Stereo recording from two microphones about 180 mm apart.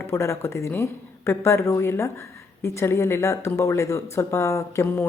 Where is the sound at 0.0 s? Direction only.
15° left (ahead or behind).